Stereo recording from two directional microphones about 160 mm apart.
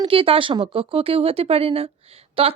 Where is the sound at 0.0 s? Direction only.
35° right (ahead or behind).